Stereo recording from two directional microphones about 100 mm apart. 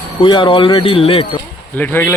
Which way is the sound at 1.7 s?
20° left (ahead or behind).